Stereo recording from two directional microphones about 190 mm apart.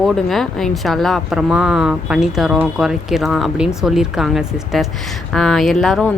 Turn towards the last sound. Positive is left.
turn(degrees=0)  # may be behind; listen again after turning